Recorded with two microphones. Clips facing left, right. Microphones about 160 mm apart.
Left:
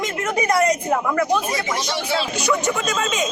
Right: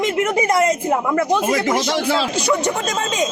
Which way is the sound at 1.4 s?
90° right.